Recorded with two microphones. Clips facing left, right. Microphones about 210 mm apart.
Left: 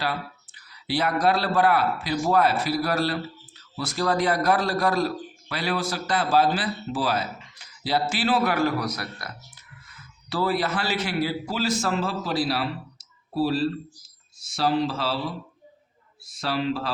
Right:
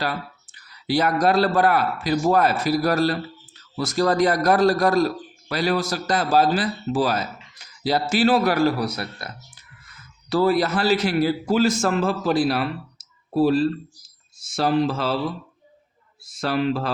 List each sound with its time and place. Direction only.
0.9 s a man's voice: 45° right (ahead or behind); by 9.3 s 25° right (ahead or behind)
10.2 s a man's voice: 45° right (ahead or behind)
16.4 s a man's voice: 50° right (ahead or behind)